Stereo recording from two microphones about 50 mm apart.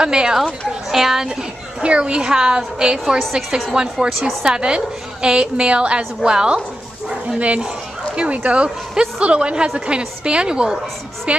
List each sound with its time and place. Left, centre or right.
0.0 s a woman's voice: centre